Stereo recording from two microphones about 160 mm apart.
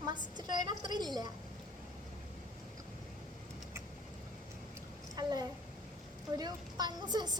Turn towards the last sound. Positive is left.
turn(degrees=-25)  # may be behind; listen again after turning